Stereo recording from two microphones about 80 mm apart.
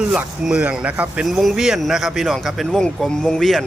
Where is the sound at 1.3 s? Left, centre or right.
Centre.